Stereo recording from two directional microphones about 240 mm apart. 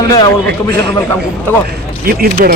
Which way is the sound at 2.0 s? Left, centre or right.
Right.